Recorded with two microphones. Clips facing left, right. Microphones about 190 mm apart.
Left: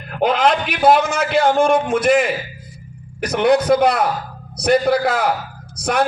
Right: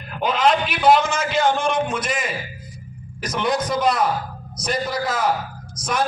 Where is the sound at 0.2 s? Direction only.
65° left (ahead or behind).